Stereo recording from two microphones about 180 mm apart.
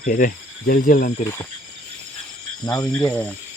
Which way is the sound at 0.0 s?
50° left (ahead or behind).